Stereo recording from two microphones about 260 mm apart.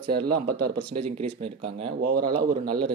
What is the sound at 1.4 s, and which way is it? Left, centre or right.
Speech, right.